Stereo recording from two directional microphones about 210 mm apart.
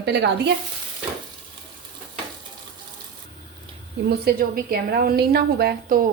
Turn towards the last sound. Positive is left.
turn(degrees=-45)  # may be behind; listen again after turning